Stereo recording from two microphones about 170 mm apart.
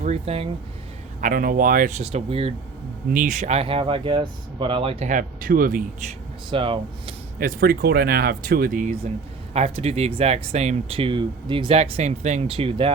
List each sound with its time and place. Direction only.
0.0 s speech: 35° right (ahead or behind)
1.2 s speech: 55° right (ahead or behind); by 2.5 s 35° right (ahead or behind)
3.1 s speech: 50° right (ahead or behind); by 5.0 s 35° right (ahead or behind)
5.0 s speech: 50° right (ahead or behind)
6.5 s speech: 30° right (ahead or behind)
7.3 s speech: 60° right (ahead or behind)
9.5 s speech: 35° right (ahead or behind)